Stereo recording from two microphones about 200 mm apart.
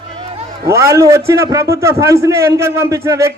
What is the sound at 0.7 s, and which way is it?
A man's voice, 15° right (ahead or behind).